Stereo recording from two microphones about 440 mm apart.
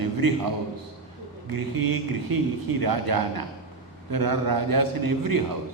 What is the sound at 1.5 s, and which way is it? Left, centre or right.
Speech, right.